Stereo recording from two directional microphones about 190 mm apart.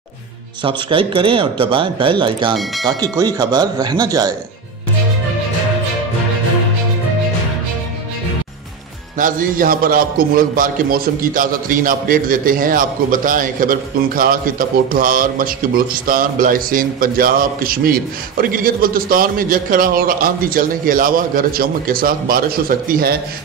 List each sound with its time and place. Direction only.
0.7 s speech: 30° right (ahead or behind)
2.5 s speech: centre (ahead or behind)
3.0 s speech: 20° right (ahead or behind)
9.2 s a man's voice: 45° right (ahead or behind)